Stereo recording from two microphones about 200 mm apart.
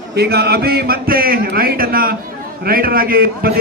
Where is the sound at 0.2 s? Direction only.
50° right (ahead or behind).